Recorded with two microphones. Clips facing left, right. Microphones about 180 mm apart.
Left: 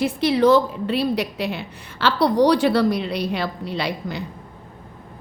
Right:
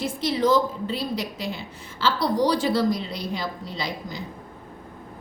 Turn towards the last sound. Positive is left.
turn(degrees=65)  # may be behind; listen again after turning